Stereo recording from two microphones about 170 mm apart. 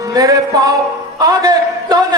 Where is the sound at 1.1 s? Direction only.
20° right (ahead or behind).